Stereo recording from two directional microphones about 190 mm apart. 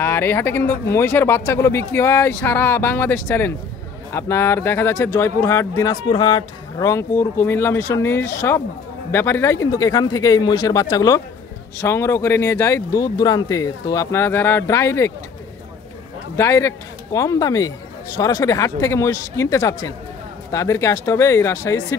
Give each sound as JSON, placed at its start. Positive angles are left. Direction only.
{"t": 0.0, "sound": "speech", "side_deg": 10}
{"t": 16.3, "sound": "speech", "side_deg": 15}